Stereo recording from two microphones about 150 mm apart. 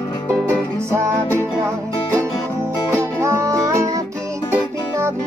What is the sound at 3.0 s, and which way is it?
Music, 20° right (ahead or behind).